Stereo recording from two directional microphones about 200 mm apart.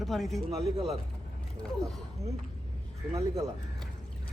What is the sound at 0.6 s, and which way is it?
Speech, 30° right (ahead or behind).